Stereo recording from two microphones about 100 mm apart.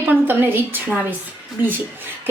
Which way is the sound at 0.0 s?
20° right (ahead or behind).